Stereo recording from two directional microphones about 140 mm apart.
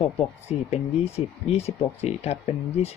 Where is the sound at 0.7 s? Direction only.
50° left (ahead or behind).